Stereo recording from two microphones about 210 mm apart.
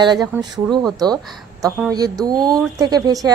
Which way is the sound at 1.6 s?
15° right (ahead or behind).